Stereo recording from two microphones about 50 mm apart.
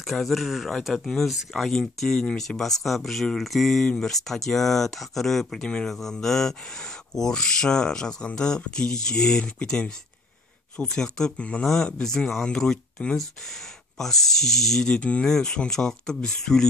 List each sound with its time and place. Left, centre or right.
0.0 s speech: centre
14.9 s speech: left
15.2 s speech: centre